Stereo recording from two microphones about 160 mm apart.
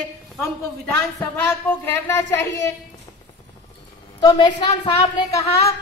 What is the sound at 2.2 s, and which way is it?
Speech, 20° left (ahead or behind).